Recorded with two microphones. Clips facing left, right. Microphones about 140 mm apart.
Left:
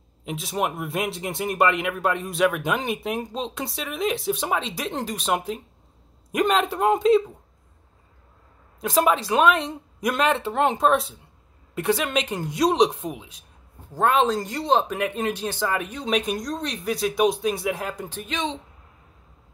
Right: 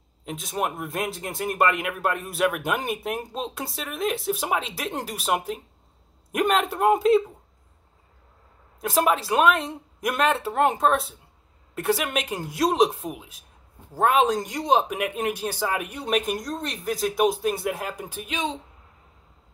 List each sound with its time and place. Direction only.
0.2 s speech: centre (ahead or behind)
8.8 s speech: centre (ahead or behind)